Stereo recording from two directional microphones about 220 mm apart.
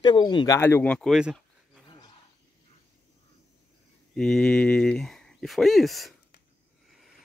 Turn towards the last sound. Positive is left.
turn(degrees=0)  # may be behind; listen again after turning